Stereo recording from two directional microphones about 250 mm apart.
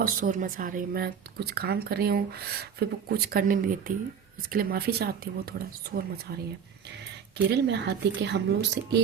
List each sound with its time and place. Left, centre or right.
0.0 s speech: right
7.5 s a woman's voice: right